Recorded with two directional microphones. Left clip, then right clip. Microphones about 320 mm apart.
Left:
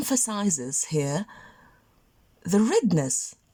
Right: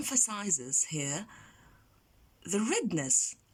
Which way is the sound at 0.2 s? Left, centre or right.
Left.